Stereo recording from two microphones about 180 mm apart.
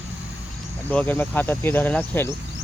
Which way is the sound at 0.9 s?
10° left (ahead or behind).